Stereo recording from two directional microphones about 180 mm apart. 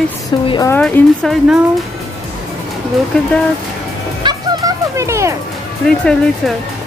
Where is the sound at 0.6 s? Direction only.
10° left (ahead or behind).